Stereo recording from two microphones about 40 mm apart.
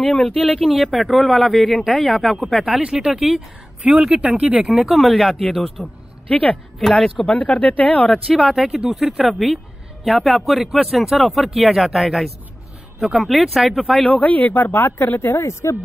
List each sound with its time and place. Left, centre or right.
0.0 s speech: left
0.6 s speech: centre
2.6 s speech: centre
3.1 s speech: centre
4.1 s speech: right
4.6 s speech: centre
6.2 s speech: left
6.8 s speech: centre
7.2 s speech: left
8.3 s speech: centre
14.0 s speech: left